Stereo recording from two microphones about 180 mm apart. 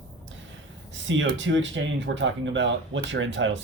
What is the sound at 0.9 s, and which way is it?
Speech, 90° right.